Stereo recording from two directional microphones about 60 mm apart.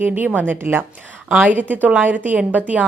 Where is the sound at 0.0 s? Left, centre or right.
Right.